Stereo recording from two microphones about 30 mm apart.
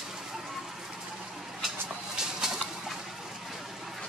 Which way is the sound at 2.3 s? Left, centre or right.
Centre.